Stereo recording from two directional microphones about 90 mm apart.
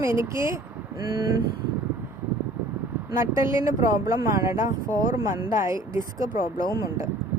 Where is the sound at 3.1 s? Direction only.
30° right (ahead or behind).